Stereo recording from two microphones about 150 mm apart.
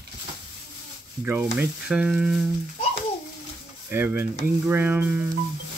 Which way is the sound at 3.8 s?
15° right (ahead or behind).